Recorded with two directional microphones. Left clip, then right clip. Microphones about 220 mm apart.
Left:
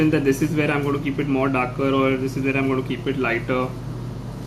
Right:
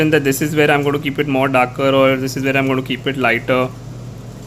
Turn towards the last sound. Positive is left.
turn(degrees=-65)  # may be behind; listen again after turning